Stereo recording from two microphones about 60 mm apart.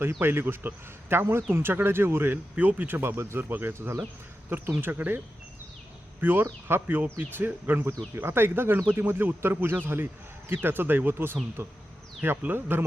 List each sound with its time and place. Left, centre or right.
0.0 s speech: right
2.6 s speech: right
6.4 s speech: right
11.6 s speech: right
12.4 s speech: right